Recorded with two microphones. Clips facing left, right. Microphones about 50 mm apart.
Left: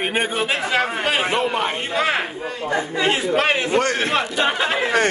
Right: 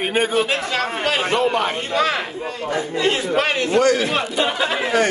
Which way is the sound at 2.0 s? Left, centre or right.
Left.